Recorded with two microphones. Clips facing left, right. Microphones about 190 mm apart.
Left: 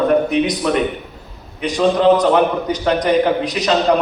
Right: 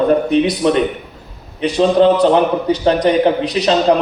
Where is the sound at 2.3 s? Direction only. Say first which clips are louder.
Right 2 dB; 30° right (ahead or behind).